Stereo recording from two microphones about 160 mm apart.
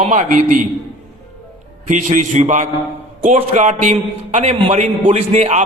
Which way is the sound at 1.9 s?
55° right (ahead or behind).